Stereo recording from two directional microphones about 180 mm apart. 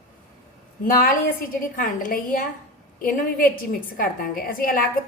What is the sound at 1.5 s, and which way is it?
A woman's voice, 50° left (ahead or behind).